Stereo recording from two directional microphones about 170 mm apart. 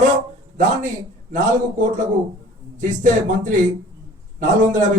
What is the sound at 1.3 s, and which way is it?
A man's voice, 50° right (ahead or behind).